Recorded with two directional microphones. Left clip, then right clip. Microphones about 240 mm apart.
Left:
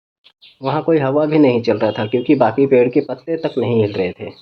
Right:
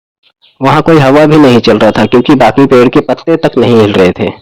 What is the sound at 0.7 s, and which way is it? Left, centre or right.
A man's voice, right.